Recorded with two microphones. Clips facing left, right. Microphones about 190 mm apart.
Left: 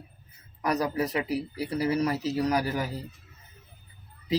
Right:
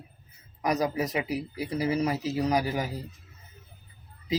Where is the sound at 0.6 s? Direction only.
20° right (ahead or behind).